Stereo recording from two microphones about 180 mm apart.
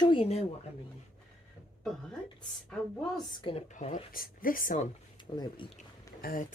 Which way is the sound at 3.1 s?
30° left (ahead or behind).